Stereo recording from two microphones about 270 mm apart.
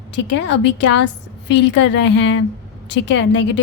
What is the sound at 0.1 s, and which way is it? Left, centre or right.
Speech, left.